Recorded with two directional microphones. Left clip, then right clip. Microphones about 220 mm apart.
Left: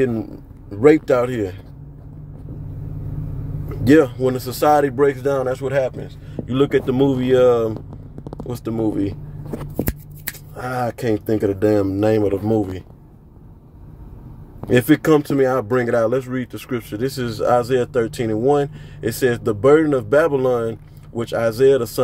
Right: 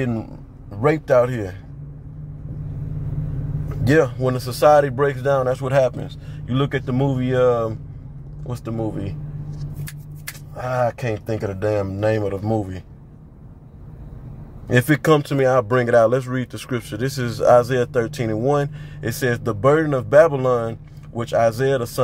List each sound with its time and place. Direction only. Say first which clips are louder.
0.7 s speech: left 5 dB; 15° left (ahead or behind)
3.8 s speech: left 3 dB; 10° left (ahead or behind); by 6.1 s 10° right (ahead or behind)
6.4 s speech: left 6 dB; 10° left (ahead or behind)
14.7 s speech: left 2 dB; 5° left (ahead or behind)